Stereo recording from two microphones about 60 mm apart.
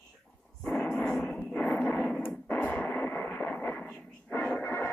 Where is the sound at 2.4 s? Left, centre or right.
Left.